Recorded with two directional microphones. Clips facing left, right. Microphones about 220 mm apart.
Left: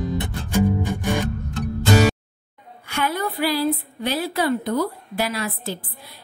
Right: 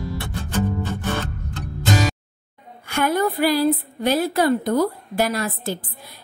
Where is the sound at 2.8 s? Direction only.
50° right (ahead or behind).